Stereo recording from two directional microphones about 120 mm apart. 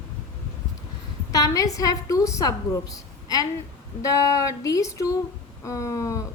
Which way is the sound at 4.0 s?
30° left (ahead or behind).